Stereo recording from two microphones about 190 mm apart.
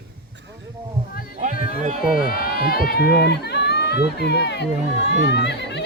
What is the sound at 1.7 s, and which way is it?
Run, 40° right (ahead or behind).